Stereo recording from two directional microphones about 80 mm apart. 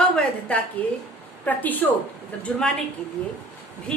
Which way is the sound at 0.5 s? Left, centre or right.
Centre.